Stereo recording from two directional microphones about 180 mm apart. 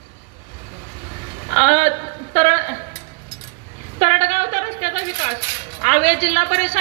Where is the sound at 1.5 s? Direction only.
40° right (ahead or behind).